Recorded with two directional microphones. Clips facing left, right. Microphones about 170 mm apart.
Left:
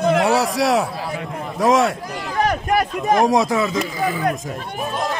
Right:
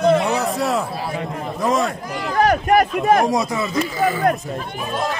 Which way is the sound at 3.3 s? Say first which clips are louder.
Left 3 dB; 90° left.